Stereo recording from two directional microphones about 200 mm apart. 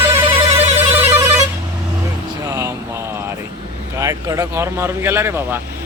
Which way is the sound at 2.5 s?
15° right (ahead or behind).